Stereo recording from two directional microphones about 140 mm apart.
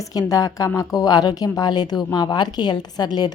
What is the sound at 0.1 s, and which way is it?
A woman's voice, 25° left (ahead or behind).